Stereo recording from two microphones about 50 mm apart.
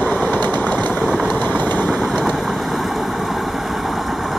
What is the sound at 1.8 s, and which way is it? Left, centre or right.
Vehicle, centre.